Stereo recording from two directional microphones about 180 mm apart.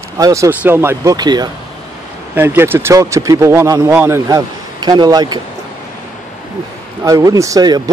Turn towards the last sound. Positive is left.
turn(degrees=-20)  # may be behind; listen again after turning